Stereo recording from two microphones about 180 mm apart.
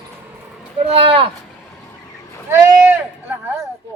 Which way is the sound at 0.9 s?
30° right (ahead or behind).